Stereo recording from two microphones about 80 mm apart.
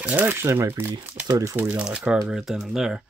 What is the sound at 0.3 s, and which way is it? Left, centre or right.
Speech, right.